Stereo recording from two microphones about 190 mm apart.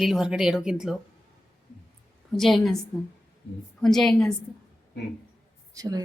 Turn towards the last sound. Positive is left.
turn(degrees=-20)  # may be behind; listen again after turning